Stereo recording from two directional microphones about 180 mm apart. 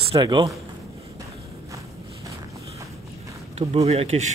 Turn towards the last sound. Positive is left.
turn(degrees=-35)  # may be behind; listen again after turning